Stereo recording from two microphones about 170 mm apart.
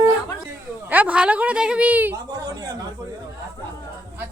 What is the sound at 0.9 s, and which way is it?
A woman's voice, 10° right (ahead or behind).